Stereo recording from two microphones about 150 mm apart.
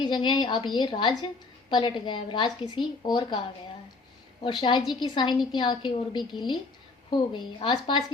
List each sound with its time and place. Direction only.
0.0 s a woman's voice: 30° left (ahead or behind)
4.4 s a woman's voice: 35° left (ahead or behind)